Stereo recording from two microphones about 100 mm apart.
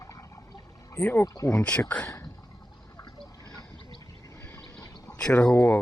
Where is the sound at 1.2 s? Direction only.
35° left (ahead or behind).